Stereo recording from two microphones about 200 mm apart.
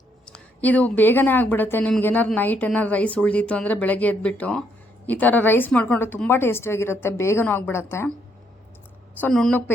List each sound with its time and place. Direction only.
0.3 s a woman's voice: 5° left (ahead or behind)
9.2 s a woman's voice: 5° left (ahead or behind)